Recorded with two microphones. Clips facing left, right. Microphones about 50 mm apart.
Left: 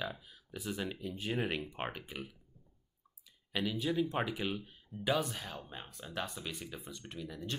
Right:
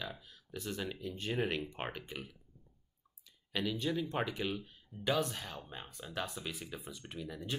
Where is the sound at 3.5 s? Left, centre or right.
Centre.